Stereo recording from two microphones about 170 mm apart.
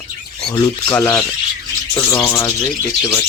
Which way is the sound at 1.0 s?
5° left (ahead or behind).